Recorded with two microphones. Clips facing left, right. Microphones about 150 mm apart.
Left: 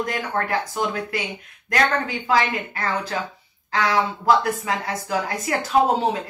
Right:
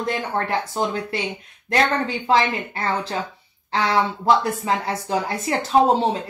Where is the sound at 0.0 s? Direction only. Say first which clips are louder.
Right 1 dB; 30° right (ahead or behind).